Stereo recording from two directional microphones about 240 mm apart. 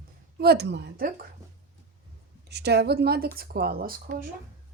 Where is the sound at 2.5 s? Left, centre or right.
Right.